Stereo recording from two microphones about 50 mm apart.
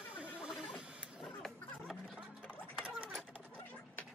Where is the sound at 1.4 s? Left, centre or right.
Centre.